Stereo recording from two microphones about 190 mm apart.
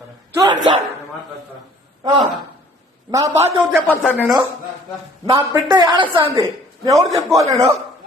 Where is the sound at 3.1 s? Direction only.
15° right (ahead or behind).